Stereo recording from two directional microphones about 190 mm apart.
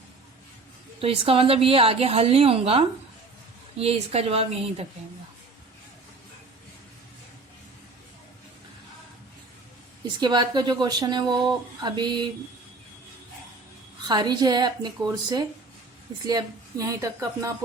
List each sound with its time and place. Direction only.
1.0 s a woman's voice: 30° right (ahead or behind)
10.2 s speech: 25° right (ahead or behind)
14.1 s a woman's voice: 20° right (ahead or behind)